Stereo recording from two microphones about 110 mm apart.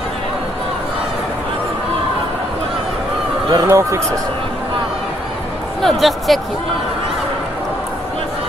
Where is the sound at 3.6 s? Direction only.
25° right (ahead or behind).